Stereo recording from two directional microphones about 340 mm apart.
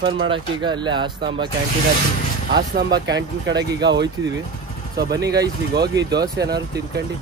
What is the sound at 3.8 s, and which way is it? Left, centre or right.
Speech, right.